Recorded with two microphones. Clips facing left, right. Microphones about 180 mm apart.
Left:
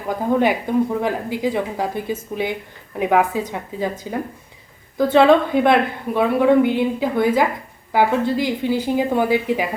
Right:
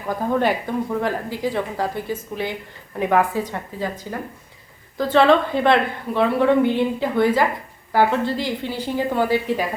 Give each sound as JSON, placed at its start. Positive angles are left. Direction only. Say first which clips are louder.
{"t": 0.3, "sound": "a woman's voice", "louder": "left 4 dB", "side_deg": 15}